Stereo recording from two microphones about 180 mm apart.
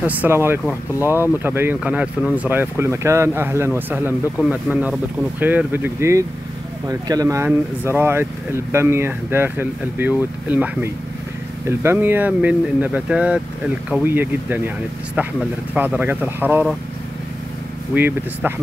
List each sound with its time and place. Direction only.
0.0 s speech: 10° right (ahead or behind)
17.9 s speech: 10° right (ahead or behind)